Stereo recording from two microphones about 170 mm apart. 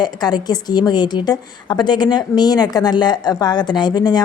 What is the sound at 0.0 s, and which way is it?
A woman's voice, 25° left (ahead or behind).